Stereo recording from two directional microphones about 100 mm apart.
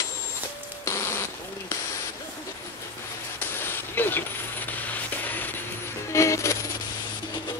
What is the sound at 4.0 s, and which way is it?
Vehicle, 20° left (ahead or behind).